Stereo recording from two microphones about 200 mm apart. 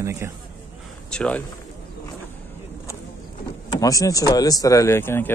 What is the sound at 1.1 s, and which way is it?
Speech, 5° left (ahead or behind).